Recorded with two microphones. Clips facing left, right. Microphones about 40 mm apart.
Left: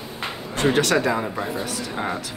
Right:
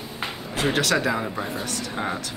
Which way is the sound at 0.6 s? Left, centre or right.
Centre.